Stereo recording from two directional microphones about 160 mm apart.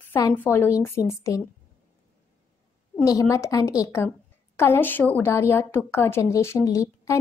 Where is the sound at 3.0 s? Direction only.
20° left (ahead or behind).